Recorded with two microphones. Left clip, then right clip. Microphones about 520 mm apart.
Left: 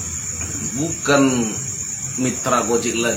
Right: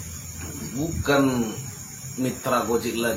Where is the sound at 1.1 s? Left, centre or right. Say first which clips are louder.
Left 5 dB; right.